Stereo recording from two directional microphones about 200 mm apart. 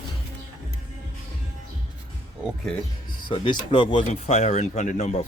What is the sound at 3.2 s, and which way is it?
Speech, 25° left (ahead or behind).